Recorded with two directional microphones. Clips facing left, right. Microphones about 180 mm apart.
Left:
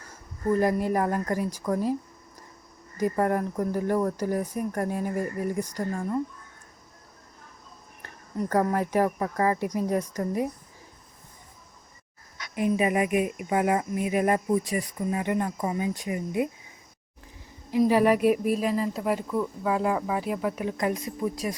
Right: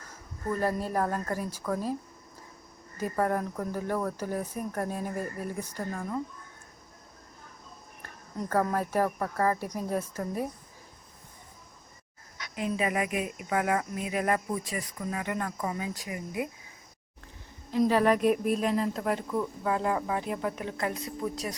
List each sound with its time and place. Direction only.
0.4 s speech: 15° left (ahead or behind)
3.0 s speech: 10° left (ahead or behind)
8.4 s speech: 15° left (ahead or behind)
12.5 s cricket: 15° left (ahead or behind)
17.7 s speech: 10° left (ahead or behind)